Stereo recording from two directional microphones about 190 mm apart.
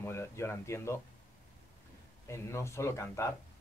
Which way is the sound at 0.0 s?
15° left (ahead or behind).